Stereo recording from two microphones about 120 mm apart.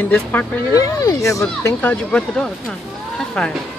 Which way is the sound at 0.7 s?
30° left (ahead or behind).